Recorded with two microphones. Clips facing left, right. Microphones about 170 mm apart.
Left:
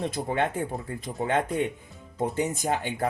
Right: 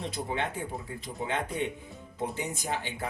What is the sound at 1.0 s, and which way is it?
Speech, 50° left (ahead or behind).